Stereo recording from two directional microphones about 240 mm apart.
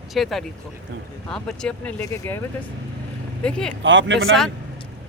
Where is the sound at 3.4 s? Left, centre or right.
Centre.